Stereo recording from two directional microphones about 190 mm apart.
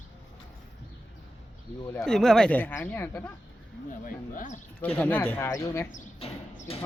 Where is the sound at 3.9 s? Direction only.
45° left (ahead or behind).